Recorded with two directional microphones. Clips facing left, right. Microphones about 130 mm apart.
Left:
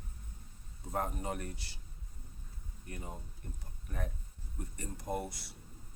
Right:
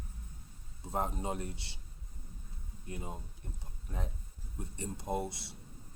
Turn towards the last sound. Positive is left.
turn(degrees=-25)  # may be behind; listen again after turning